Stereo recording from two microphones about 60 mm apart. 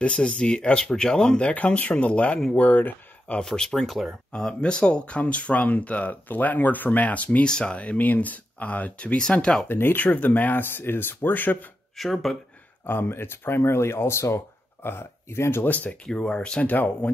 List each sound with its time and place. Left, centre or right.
0.0 s speech: centre
1.5 s speech: left
3.3 s speech: centre
4.3 s speech: centre
9.7 s speech: left
12.0 s speech: centre
12.8 s speech: left
15.6 s speech: left
16.3 s speech: centre
16.6 s speech: left